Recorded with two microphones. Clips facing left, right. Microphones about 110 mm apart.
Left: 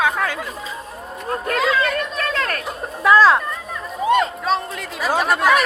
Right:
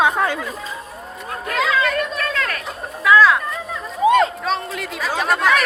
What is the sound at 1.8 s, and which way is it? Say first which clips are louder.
Chatter: right 1 dB; 30° left (ahead or behind).